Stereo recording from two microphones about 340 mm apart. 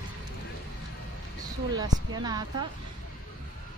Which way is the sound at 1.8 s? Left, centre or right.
Centre.